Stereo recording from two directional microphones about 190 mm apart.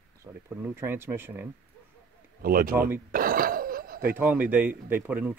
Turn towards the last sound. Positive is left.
turn(degrees=-10)  # may be behind; listen again after turning